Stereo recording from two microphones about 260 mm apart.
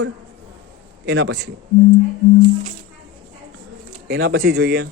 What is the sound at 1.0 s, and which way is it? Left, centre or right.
Speech, right.